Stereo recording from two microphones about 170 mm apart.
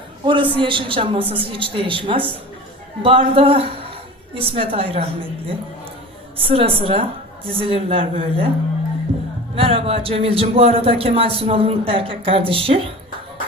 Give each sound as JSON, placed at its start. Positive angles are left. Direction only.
{"t": 0.3, "sound": "a man's voice", "side_deg": -30}
{"t": 9.6, "sound": "a man's voice", "side_deg": -35}